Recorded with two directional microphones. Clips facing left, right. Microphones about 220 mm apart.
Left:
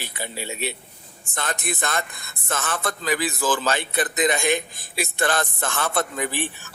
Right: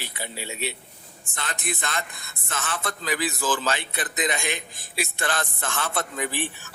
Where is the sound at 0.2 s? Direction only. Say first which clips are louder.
Left 3 dB; 50° left (ahead or behind).